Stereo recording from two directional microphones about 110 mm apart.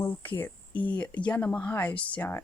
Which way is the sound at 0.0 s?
15° left (ahead or behind).